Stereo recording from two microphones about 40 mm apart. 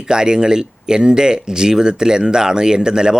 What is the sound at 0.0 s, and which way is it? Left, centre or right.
Speech, centre.